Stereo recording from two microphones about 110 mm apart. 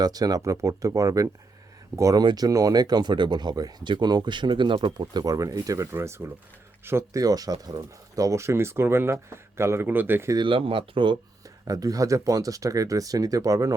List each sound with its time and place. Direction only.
0.0 s speech: 35° right (ahead or behind); by 10.3 s 20° right (ahead or behind)
10.3 s speech: 50° right (ahead or behind)
11.7 s speech: 35° right (ahead or behind)